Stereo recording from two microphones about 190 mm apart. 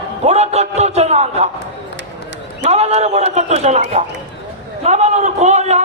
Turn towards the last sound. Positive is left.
turn(degrees=-35)  # may be behind; listen again after turning